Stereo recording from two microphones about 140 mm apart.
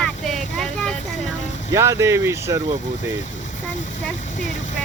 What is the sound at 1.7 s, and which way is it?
Speech, 20° right (ahead or behind).